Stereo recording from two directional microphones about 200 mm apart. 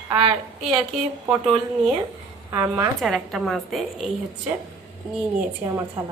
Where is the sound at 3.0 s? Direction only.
Centre (ahead or behind).